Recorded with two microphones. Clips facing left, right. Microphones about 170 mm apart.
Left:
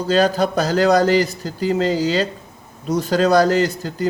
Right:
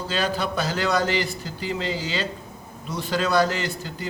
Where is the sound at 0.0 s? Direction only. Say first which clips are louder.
Left 9 dB; 40° left (ahead or behind).